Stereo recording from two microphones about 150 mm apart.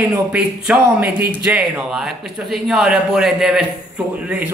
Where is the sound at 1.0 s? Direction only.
90° right.